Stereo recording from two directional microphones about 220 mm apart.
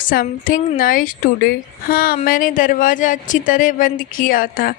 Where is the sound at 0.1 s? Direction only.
40° left (ahead or behind).